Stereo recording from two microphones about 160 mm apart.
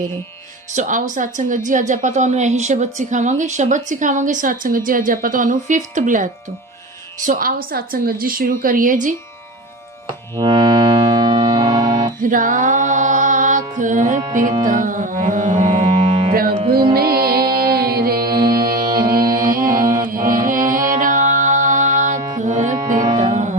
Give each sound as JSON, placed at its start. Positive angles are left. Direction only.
{"t": 0.7, "sound": "a woman's voice", "side_deg": -50}
{"t": 10.3, "sound": "music", "side_deg": -25}
{"t": 12.2, "sound": "mantra", "side_deg": -55}
{"t": 14.6, "sound": "a woman's voice", "side_deg": -55}
{"t": 15.9, "sound": "music", "side_deg": -35}
{"t": 16.3, "sound": "music", "side_deg": -70}
{"t": 18.3, "sound": "music", "side_deg": -25}
{"t": 19.5, "sound": "music", "side_deg": -60}
{"t": 19.8, "sound": "music", "side_deg": -20}
{"t": 20.1, "sound": "music", "side_deg": -60}